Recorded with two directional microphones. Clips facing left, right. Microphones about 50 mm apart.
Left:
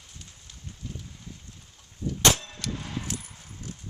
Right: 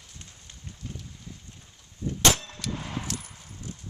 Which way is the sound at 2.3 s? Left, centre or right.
Centre.